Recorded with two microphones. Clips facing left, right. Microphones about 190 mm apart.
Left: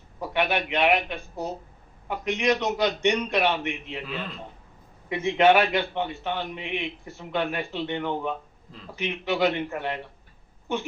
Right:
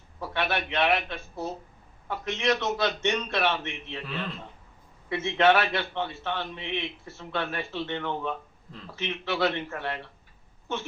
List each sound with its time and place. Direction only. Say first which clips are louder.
0.2 s a man's voice: left 4 dB; 15° left (ahead or behind)